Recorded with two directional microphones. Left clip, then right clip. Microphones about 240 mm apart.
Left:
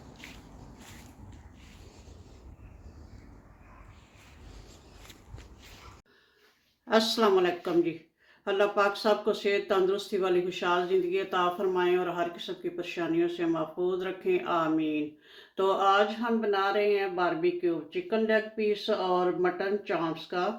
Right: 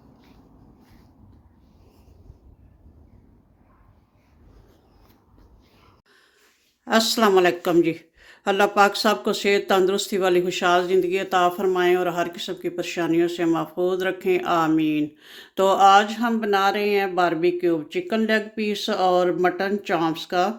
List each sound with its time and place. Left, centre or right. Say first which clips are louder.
6.8 s a woman's voice: right 5 dB; right